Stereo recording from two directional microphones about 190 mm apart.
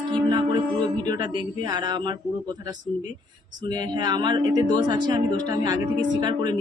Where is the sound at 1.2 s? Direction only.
20° right (ahead or behind).